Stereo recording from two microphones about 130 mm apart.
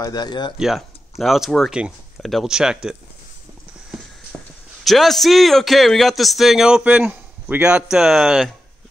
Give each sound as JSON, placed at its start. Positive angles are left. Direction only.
{"t": 0.0, "sound": "speech", "side_deg": 30}
{"t": 0.6, "sound": "a man's voice", "side_deg": 0}
{"t": 4.8, "sound": "a man's voice", "side_deg": 0}